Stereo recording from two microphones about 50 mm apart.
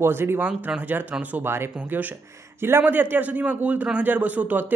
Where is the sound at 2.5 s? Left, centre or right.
Right.